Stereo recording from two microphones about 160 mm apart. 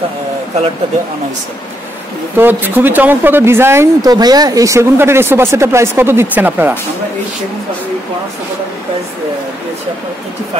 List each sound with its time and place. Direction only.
2.3 s a woman's voice: 10° right (ahead or behind)